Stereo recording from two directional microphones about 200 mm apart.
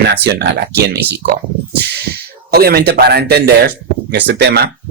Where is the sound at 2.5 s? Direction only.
50° right (ahead or behind).